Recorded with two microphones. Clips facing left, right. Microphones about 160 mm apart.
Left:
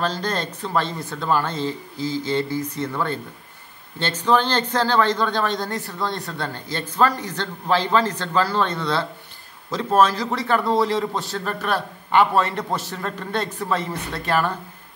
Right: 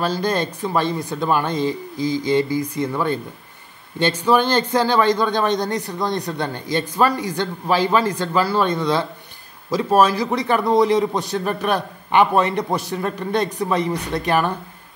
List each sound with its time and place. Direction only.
0.0 s a man's voice: 10° right (ahead or behind)